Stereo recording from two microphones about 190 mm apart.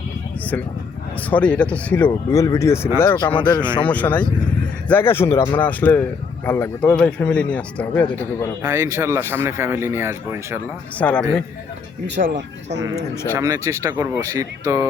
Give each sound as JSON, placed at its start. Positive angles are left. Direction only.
{"t": 1.2, "sound": "a man's voice", "side_deg": 5}
{"t": 3.8, "sound": "a man's voice", "side_deg": 10}
{"t": 8.6, "sound": "speech", "side_deg": -15}
{"t": 10.9, "sound": "a man's voice", "side_deg": 5}
{"t": 12.0, "sound": "speech", "side_deg": -65}
{"t": 13.3, "sound": "speech", "side_deg": -20}